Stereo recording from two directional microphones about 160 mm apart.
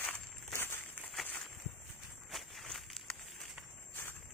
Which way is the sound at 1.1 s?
5° left (ahead or behind).